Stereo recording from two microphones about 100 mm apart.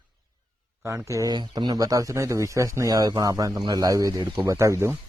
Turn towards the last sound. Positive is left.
turn(degrees=-25)  # may be behind; listen again after turning